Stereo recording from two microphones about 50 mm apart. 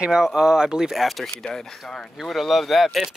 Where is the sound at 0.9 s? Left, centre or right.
Centre.